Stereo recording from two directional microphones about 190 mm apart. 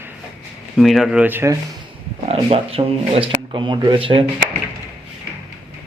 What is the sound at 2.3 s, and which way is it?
Speech, 30° right (ahead or behind).